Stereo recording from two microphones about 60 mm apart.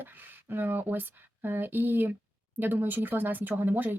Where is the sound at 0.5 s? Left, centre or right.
Right.